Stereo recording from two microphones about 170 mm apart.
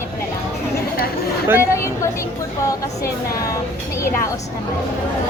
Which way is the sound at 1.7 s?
15° left (ahead or behind).